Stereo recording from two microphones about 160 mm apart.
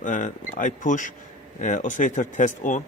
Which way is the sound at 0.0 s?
50° left (ahead or behind).